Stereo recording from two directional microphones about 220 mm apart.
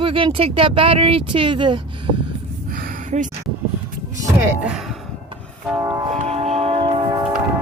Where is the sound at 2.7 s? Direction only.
40° right (ahead or behind).